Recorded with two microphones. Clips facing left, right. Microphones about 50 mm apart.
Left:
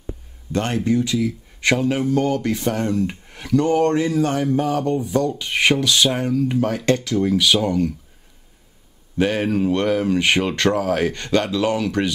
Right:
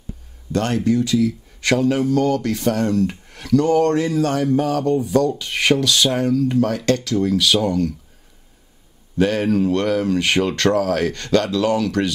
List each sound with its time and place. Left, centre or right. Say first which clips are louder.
0.0 s speech: left 3 dB; left
9.2 s speech: right 2 dB; centre